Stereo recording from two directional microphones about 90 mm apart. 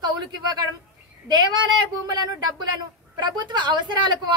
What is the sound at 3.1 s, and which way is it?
Speech, 60° right (ahead or behind).